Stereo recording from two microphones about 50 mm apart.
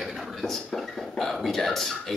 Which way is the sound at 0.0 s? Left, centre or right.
Centre.